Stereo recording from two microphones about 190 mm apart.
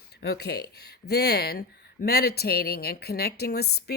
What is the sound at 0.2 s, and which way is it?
Speech, 60° left (ahead or behind).